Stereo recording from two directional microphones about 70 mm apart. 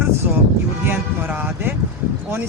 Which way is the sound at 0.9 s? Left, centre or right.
Right.